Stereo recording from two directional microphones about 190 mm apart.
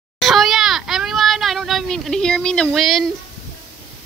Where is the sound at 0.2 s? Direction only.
Centre (ahead or behind).